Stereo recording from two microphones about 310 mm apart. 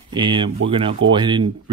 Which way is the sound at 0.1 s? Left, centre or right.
Centre.